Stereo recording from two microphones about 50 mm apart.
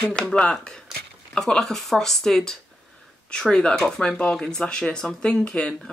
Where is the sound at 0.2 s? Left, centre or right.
Centre.